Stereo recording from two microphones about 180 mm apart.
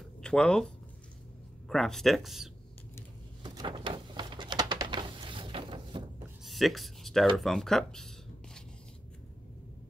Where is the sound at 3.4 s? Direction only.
25° right (ahead or behind).